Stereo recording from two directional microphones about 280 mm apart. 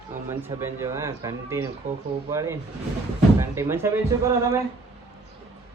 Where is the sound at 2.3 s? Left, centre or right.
Centre.